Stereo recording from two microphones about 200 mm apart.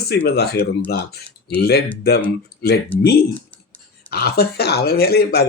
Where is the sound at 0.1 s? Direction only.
55° left (ahead or behind).